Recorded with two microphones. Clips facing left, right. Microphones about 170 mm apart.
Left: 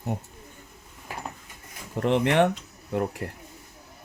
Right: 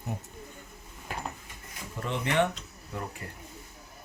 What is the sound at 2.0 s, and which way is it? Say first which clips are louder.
Speech: left 7 dB; 75° left (ahead or behind).